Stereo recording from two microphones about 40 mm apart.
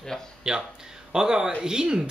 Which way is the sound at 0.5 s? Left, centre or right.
Centre.